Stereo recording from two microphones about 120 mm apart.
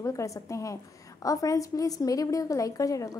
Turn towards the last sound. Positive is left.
turn(degrees=30)  # may be behind; listen again after turning